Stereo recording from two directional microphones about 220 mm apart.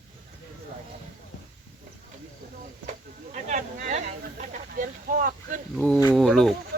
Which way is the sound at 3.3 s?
35° right (ahead or behind).